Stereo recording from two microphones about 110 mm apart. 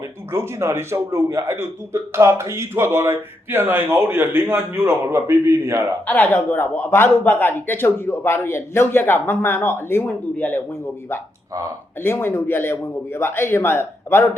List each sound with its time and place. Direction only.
0.3 s speech: 25° right (ahead or behind)
6.1 s speech: 15° left (ahead or behind)